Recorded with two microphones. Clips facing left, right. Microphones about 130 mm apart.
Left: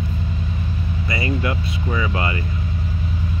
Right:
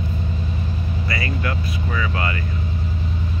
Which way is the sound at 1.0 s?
20° left (ahead or behind).